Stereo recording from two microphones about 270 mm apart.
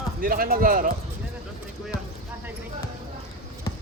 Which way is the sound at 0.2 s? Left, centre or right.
Right.